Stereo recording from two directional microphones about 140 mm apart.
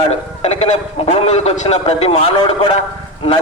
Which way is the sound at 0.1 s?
50° left (ahead or behind).